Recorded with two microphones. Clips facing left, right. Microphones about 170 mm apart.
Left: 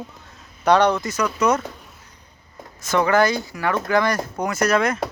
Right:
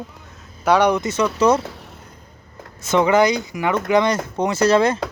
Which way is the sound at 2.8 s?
20° right (ahead or behind).